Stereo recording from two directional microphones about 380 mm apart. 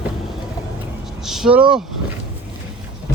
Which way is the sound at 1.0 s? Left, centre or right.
Centre.